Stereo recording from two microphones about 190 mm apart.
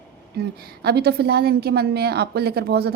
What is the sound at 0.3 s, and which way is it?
A woman's voice, 55° right (ahead or behind).